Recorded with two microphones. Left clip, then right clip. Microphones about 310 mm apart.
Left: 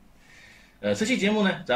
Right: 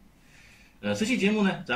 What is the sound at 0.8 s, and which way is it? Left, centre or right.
Speech, centre.